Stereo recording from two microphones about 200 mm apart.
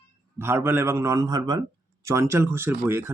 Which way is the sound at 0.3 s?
10° right (ahead or behind).